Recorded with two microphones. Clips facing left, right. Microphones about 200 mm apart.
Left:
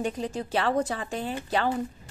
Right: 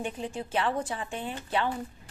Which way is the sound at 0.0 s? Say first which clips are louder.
Left 4 dB; 40° left (ahead or behind).